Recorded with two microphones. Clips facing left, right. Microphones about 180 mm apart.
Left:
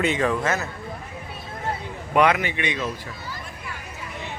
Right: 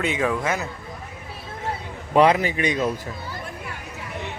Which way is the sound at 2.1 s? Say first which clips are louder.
Right 3 dB; 30° right (ahead or behind).